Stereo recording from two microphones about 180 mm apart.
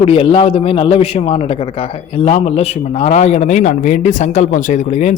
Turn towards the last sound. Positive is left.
turn(degrees=40)  # may be behind; listen again after turning